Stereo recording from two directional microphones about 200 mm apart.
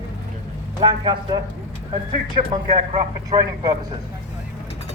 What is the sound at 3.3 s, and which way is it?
Speech, 20° right (ahead or behind).